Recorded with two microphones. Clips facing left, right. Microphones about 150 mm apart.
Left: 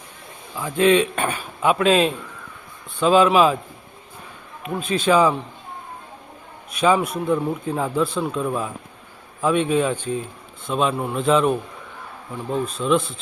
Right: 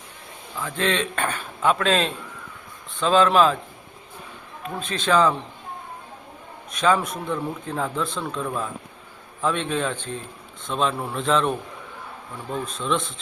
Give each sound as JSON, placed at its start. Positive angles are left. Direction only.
{"t": 0.6, "sound": "speech", "side_deg": 10}
{"t": 4.6, "sound": "speech", "side_deg": 10}
{"t": 6.7, "sound": "speech", "side_deg": 10}
{"t": 12.6, "sound": "speech", "side_deg": 5}